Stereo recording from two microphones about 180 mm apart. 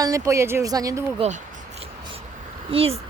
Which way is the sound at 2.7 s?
30° right (ahead or behind).